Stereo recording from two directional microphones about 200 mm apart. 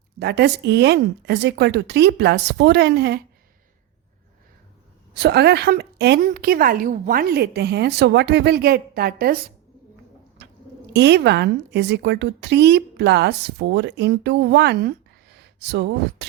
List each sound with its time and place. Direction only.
0.2 s a woman's voice: 55° right (ahead or behind)
5.1 s a woman's voice: 55° right (ahead or behind)
10.9 s a woman's voice: 55° right (ahead or behind)